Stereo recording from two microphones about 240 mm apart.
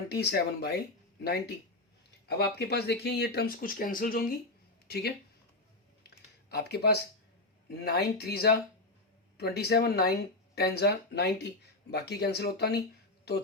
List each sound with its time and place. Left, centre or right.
0.1 s speech: left
6.5 s speech: left